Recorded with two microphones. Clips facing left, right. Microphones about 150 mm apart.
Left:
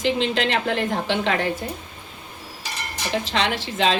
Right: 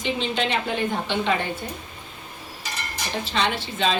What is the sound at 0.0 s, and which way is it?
A woman's voice, 90° left.